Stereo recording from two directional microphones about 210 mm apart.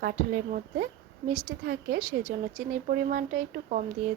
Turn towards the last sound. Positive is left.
turn(degrees=-40)  # may be behind; listen again after turning